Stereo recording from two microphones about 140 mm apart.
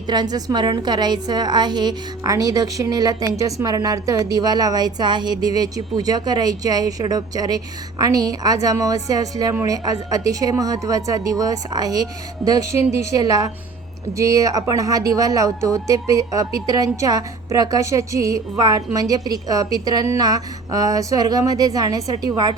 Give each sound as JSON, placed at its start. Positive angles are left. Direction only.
{"t": 0.1, "sound": "speech", "side_deg": -30}